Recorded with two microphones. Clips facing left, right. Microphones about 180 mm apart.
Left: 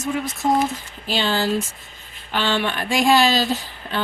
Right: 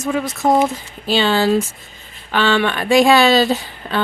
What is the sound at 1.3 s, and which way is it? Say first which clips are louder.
Speech: right 5 dB; 70° right (ahead or behind).